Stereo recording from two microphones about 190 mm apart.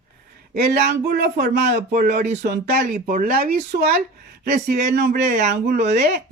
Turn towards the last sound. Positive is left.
turn(degrees=-55)  # may be behind; listen again after turning